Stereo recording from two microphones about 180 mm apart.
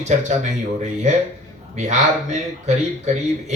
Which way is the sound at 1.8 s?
40° right (ahead or behind).